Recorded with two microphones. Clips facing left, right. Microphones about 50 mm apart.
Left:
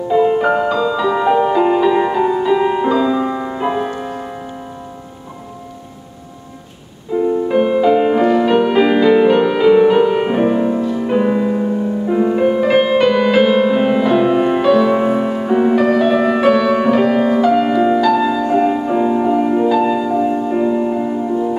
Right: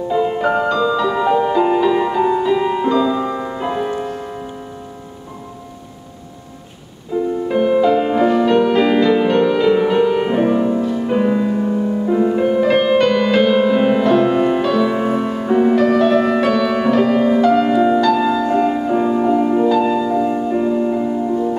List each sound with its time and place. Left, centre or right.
0.1 s music: centre
7.1 s music: centre